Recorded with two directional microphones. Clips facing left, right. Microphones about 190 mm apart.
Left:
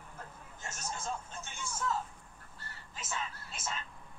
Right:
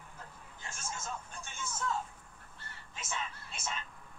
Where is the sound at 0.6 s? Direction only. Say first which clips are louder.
Left 2 dB; 40° left (ahead or behind).